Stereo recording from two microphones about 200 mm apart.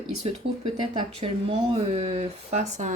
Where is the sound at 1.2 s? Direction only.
30° right (ahead or behind).